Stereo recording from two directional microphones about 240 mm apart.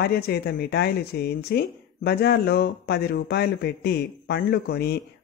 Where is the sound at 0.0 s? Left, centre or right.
Left.